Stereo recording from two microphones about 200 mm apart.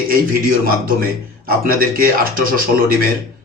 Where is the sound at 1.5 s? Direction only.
45° right (ahead or behind).